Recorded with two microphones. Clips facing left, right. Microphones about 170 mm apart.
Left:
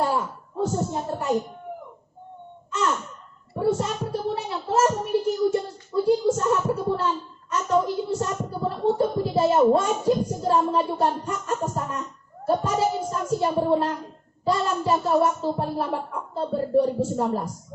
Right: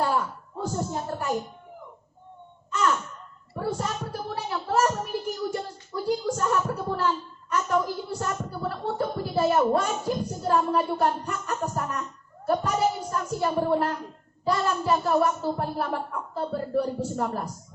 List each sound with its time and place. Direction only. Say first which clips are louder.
0.6 s a woman's voice: left 4 dB; 20° left (ahead or behind)
3.5 s a sound: left 6 dB; 25° left (ahead or behind)
7.5 s speech: left 3 dB; 20° left (ahead or behind)